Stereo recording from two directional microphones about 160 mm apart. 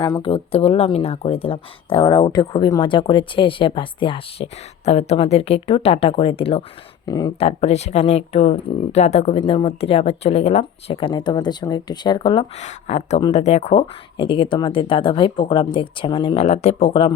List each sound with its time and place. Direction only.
0.2 s speech: 35° left (ahead or behind)
7.0 s speech: 25° left (ahead or behind)
7.3 s speech: 40° left (ahead or behind)
9.4 s speech: 30° left (ahead or behind)
12.5 s speech: 45° left (ahead or behind)